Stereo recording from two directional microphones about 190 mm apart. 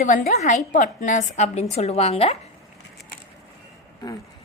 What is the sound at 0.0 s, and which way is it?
A woman's voice, 40° left (ahead or behind).